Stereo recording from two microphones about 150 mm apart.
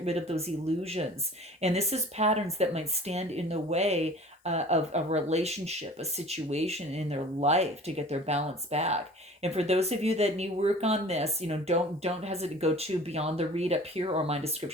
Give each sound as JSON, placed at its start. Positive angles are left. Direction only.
{"t": 0.0, "sound": "speech", "side_deg": -45}